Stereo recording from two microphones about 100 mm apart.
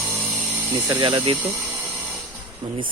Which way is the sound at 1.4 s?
20° right (ahead or behind).